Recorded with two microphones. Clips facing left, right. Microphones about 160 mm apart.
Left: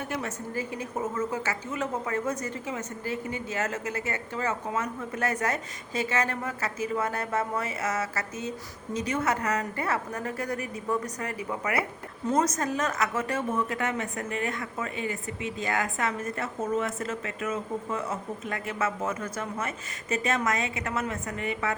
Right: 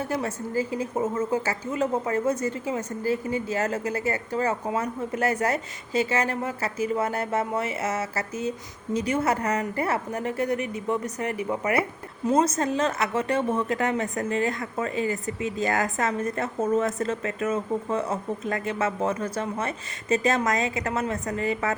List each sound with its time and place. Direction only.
0.0 s a woman's voice: 35° right (ahead or behind)